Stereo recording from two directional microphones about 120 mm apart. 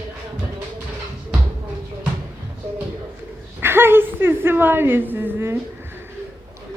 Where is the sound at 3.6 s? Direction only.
20° right (ahead or behind).